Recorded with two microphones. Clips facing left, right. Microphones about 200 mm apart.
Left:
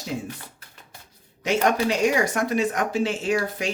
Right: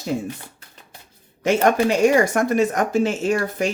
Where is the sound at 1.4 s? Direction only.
50° right (ahead or behind).